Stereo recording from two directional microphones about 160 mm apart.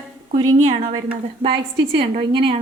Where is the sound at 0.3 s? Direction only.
25° right (ahead or behind).